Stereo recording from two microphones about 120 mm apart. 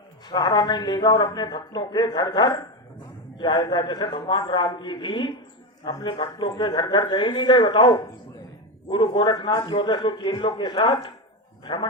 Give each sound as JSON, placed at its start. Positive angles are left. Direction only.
{"t": 0.3, "sound": "a man's voice", "side_deg": 35}